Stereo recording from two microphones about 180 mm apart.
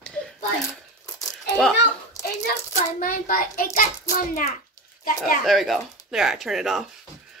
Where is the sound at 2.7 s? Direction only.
50° left (ahead or behind).